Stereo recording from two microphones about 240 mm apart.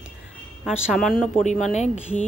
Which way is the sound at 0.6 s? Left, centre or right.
Centre.